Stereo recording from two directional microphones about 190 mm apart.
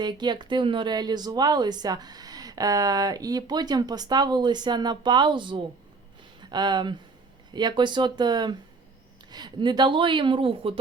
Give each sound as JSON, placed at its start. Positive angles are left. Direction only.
{"t": 0.0, "sound": "a woman's voice", "side_deg": -25}